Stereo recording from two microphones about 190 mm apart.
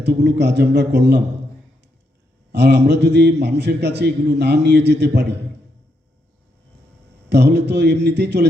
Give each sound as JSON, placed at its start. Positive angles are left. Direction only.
{"t": 0.0, "sound": "a man's voice", "side_deg": -60}
{"t": 2.5, "sound": "a man's voice", "side_deg": -60}
{"t": 7.3, "sound": "a man's voice", "side_deg": -60}